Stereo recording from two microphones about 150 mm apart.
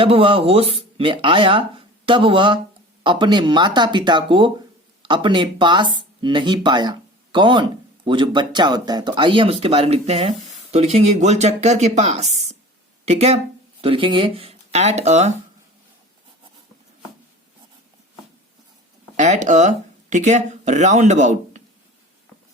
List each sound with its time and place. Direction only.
0.0 s speech: 35° right (ahead or behind)
19.1 s speech: 55° right (ahead or behind)